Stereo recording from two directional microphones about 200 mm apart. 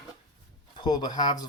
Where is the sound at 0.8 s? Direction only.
20° left (ahead or behind).